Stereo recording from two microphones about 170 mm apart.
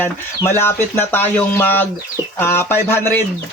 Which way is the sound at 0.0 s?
15° left (ahead or behind).